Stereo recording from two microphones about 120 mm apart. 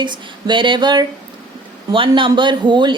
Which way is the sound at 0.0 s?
40° right (ahead or behind).